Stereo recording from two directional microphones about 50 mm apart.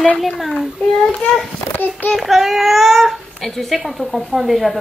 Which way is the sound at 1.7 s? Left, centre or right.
Left.